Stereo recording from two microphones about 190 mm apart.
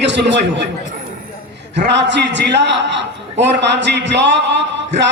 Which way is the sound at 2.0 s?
70° right (ahead or behind).